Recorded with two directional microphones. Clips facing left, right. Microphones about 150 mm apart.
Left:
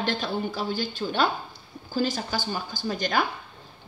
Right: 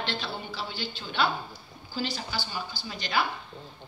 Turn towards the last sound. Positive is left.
turn(degrees=45)  # may be behind; listen again after turning